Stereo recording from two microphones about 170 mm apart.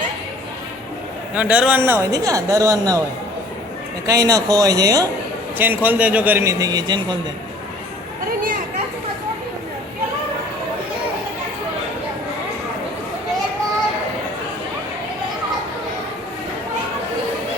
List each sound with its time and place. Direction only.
1.4 s a man's voice: 5° right (ahead or behind)
4.0 s a man's voice: 20° right (ahead or behind)